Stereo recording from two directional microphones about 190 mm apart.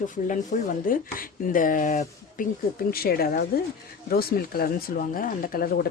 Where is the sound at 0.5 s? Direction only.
45° left (ahead or behind).